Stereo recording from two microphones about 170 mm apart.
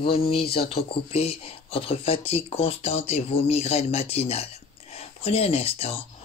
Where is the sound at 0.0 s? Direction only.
65° left (ahead or behind).